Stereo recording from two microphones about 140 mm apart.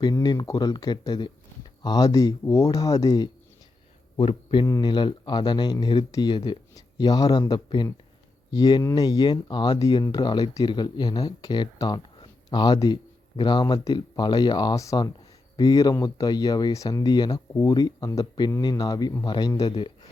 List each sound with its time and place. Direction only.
0.0 s speech: 30° left (ahead or behind)
4.2 s a man's voice: 40° left (ahead or behind)
4.6 s speech: 25° left (ahead or behind)